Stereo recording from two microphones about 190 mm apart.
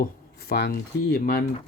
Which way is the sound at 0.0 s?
55° left (ahead or behind).